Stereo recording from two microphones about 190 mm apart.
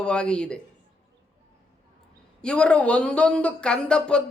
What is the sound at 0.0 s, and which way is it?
Speech, 5° left (ahead or behind).